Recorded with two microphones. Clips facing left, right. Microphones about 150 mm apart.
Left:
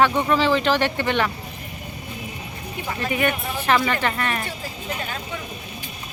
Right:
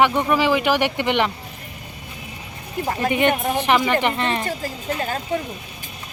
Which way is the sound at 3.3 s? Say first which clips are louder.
Right 7 dB; 45° right (ahead or behind).